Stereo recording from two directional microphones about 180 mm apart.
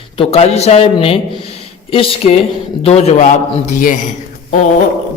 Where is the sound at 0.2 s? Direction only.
35° left (ahead or behind).